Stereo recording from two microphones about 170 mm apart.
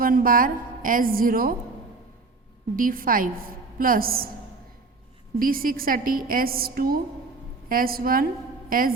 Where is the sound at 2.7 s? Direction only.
55° right (ahead or behind).